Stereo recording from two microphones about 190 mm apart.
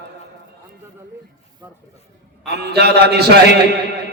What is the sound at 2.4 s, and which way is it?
Speech, 60° right (ahead or behind).